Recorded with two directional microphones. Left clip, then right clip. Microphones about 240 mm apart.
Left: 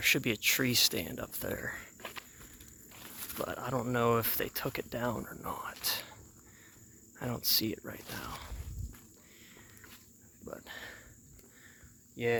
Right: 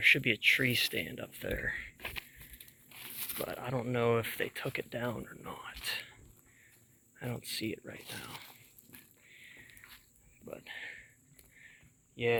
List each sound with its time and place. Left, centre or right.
0.0 s speech: centre
2.0 s a sound: right
3.3 s speech: centre
7.2 s speech: left
7.9 s speech: right
10.4 s speech: left
12.1 s speech: left